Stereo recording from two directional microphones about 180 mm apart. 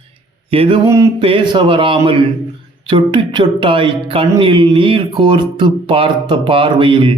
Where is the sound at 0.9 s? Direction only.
15° right (ahead or behind).